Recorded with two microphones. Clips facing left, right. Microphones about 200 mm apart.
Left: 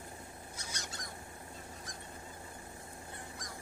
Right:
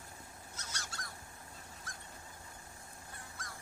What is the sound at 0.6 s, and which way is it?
Goose, 15° left (ahead or behind).